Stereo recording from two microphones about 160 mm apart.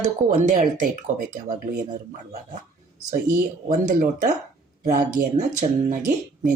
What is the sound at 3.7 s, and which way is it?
Speech, 50° right (ahead or behind).